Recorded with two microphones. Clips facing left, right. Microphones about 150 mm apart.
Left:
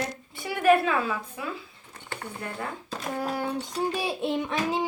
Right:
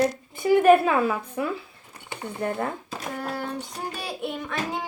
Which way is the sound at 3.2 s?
15° left (ahead or behind).